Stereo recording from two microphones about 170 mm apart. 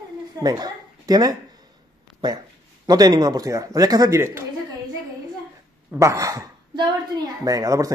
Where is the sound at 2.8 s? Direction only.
20° right (ahead or behind).